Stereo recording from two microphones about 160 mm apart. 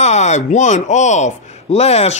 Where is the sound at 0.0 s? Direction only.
45° left (ahead or behind).